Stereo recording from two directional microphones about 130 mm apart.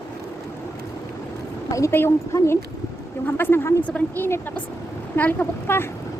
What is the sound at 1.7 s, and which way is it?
Speech, 20° left (ahead or behind).